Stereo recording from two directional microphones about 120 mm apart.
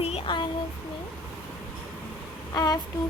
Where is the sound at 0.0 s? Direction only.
55° left (ahead or behind).